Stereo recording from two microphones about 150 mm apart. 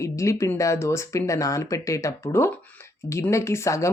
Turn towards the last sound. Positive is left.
turn(degrees=20)  # may be behind; listen again after turning